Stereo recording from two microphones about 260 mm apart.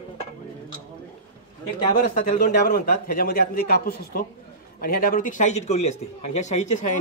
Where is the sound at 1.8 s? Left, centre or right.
Left.